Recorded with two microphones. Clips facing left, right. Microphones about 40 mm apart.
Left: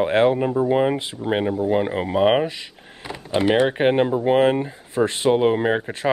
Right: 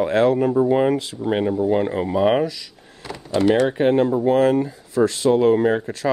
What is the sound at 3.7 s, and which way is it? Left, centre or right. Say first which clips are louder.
Speech: right 1 dB; left.